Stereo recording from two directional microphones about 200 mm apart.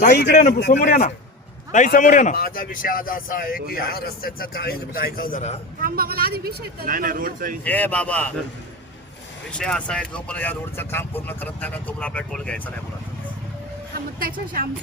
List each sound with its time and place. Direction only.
0.1 s a man's voice: 55° left (ahead or behind); by 5.5 s 40° left (ahead or behind)
5.8 s speech: 50° right (ahead or behind)
7.6 s speech: 10° left (ahead or behind)
9.5 s speech: 5° left (ahead or behind)
14.2 s speech: 45° right (ahead or behind)